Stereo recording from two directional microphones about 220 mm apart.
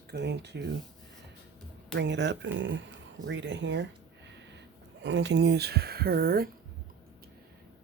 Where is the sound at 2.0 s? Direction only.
55° right (ahead or behind).